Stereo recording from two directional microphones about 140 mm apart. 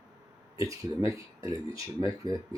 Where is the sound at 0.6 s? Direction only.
25° right (ahead or behind).